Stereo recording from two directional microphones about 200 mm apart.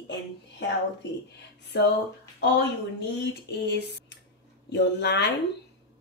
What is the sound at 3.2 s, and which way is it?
Speech, 55° left (ahead or behind).